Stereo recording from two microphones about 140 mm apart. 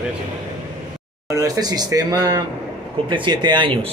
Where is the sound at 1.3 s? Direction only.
25° right (ahead or behind).